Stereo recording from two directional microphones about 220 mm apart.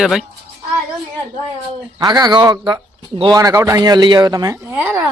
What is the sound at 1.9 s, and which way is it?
A man's voice, 15° right (ahead or behind).